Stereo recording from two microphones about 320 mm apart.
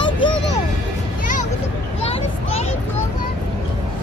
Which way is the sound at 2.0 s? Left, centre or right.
Centre.